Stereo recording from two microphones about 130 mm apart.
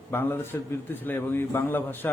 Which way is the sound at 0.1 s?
15° left (ahead or behind).